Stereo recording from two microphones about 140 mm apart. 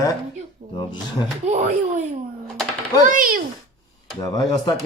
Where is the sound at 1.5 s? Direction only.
60° right (ahead or behind).